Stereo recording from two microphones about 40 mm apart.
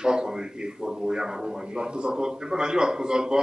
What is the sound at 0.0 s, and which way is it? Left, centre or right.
Speech, centre.